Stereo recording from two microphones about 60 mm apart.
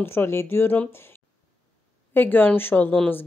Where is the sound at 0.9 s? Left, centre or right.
Left.